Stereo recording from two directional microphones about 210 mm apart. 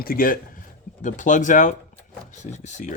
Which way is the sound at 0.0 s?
45° left (ahead or behind).